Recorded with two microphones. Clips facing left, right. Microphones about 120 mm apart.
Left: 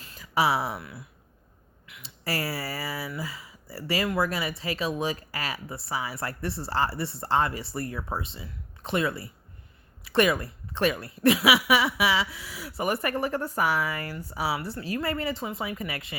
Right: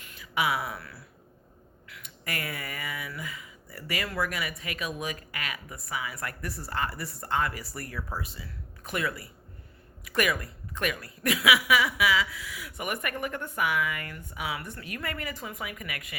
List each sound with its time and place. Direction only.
0.0 s speech: 35° left (ahead or behind)